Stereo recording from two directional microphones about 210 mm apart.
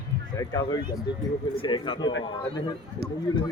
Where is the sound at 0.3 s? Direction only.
20° left (ahead or behind).